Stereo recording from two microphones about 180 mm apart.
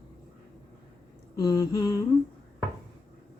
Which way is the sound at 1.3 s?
20° left (ahead or behind).